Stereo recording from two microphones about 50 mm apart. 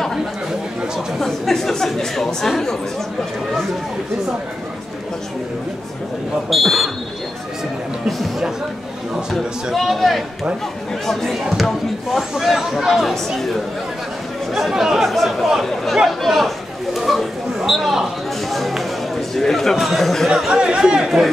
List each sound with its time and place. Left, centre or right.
1.2 s speech: centre
6.5 s speech: centre
9.7 s speech: centre
11.4 s speech: centre
14.5 s speech: centre
20.5 s speech: centre